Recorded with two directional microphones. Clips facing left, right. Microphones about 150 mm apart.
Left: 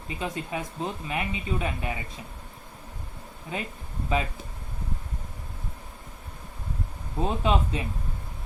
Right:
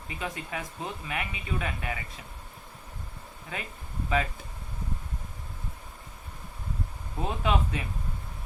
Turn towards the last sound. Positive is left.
turn(degrees=25)  # may be behind; listen again after turning